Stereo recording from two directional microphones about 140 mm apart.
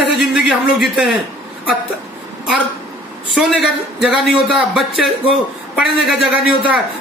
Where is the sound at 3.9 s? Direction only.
Centre (ahead or behind).